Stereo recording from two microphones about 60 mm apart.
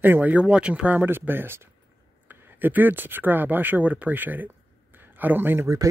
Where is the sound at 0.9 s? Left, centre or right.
Right.